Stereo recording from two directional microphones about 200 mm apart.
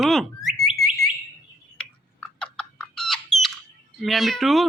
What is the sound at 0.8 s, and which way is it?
Alarm, centre (ahead or behind).